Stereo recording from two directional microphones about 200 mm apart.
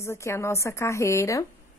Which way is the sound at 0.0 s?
15° left (ahead or behind).